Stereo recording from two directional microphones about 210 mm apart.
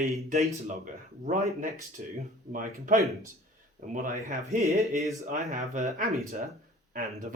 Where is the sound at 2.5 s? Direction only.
40° right (ahead or behind).